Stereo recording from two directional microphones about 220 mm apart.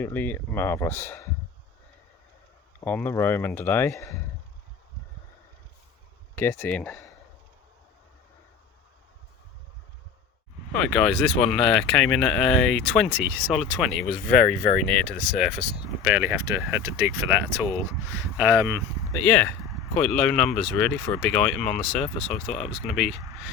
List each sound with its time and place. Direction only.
0.0 s speech: 10° left (ahead or behind)
2.8 s speech: 10° left (ahead or behind)
6.3 s speech: 10° left (ahead or behind)
10.7 s speech: 5° left (ahead or behind)
14.3 s speech: 40° left (ahead or behind)
14.8 s speech: 5° left (ahead or behind)
18.3 s speech: 10° right (ahead or behind)
19.1 s speech: 10° left (ahead or behind)